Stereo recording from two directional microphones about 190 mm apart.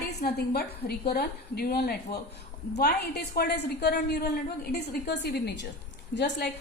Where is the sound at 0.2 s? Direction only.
55° left (ahead or behind).